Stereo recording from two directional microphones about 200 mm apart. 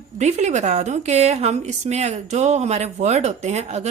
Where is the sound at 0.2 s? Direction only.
35° right (ahead or behind).